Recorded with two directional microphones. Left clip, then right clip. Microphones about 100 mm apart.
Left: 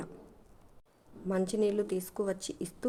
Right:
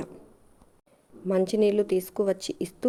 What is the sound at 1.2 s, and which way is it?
A woman's voice, 40° right (ahead or behind).